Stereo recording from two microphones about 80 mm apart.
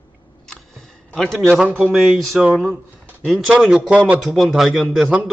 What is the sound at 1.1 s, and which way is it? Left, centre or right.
Speech, centre.